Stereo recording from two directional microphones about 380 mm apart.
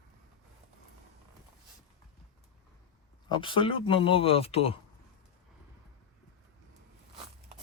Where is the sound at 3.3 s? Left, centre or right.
Centre.